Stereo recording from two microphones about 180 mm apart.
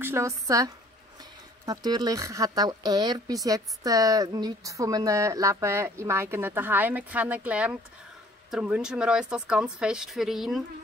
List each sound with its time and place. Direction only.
0.0 s speech: 15° right (ahead or behind)
1.7 s speech: 25° right (ahead or behind); by 10.6 s centre (ahead or behind)